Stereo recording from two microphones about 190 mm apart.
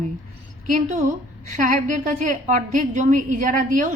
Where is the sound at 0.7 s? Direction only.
40° right (ahead or behind).